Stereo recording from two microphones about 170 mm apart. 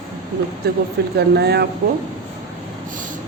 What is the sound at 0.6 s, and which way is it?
Speech, 65° right (ahead or behind).